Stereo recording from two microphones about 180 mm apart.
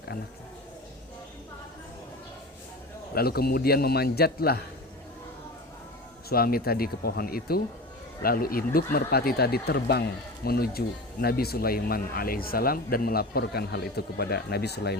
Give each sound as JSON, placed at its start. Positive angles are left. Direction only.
{"t": 3.2, "sound": "speech", "side_deg": 60}
{"t": 6.2, "sound": "speech", "side_deg": 55}